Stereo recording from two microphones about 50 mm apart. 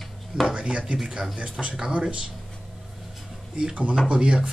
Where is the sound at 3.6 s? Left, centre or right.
Right.